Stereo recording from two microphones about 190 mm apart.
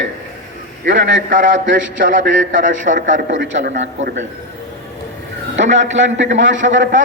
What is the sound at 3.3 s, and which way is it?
Speech, 70° right (ahead or behind).